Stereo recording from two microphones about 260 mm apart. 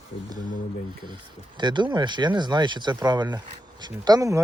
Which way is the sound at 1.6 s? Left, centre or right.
Centre.